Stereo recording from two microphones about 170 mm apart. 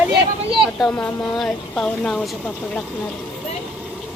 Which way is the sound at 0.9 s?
5° left (ahead or behind).